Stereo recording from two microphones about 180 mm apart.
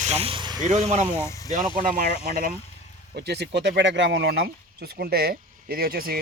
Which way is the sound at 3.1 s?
70° right (ahead or behind).